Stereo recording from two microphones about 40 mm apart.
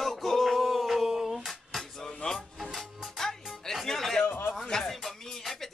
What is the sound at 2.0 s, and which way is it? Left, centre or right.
Music, centre.